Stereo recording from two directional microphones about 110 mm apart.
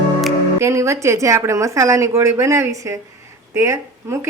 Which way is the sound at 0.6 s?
25° right (ahead or behind).